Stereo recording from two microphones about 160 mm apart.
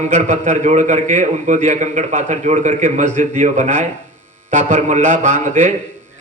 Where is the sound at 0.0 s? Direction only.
50° right (ahead or behind).